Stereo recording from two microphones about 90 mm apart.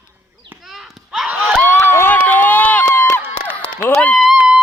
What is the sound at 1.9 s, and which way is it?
Run, 25° left (ahead or behind).